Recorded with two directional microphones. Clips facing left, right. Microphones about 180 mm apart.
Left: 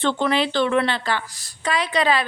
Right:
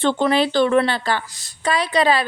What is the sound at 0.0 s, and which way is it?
A woman's voice, 40° right (ahead or behind).